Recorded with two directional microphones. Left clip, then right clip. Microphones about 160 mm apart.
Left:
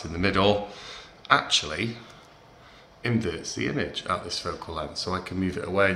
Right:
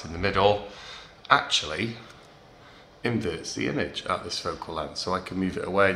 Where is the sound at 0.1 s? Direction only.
5° right (ahead or behind).